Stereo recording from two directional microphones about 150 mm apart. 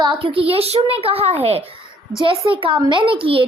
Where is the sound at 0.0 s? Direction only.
35° right (ahead or behind).